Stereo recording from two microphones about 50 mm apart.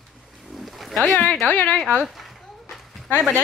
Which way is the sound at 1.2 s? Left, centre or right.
Left.